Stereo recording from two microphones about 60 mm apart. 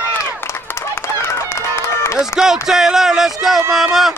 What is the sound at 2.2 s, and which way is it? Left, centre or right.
Speech, centre.